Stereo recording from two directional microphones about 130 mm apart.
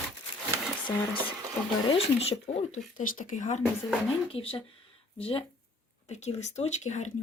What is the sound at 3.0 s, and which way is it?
Speech, 80° left.